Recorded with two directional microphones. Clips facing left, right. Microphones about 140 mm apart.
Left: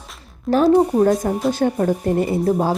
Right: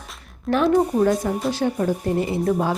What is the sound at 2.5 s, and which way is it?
Speech, 30° left (ahead or behind).